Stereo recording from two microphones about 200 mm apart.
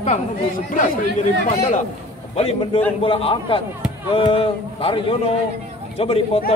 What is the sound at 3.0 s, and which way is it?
A man's voice, 25° left (ahead or behind).